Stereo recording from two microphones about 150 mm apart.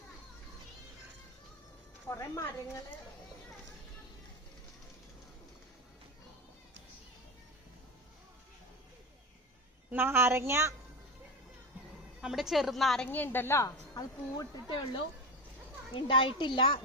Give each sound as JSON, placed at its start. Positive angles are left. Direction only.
{"t": 2.0, "sound": "a woman's voice", "side_deg": 20}
{"t": 9.9, "sound": "a woman's voice", "side_deg": -15}
{"t": 12.2, "sound": "a woman's voice", "side_deg": 0}
{"t": 16.0, "sound": "a woman's voice", "side_deg": 35}